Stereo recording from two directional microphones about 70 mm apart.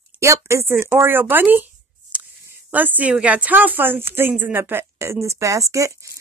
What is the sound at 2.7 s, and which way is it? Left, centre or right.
Speech, right.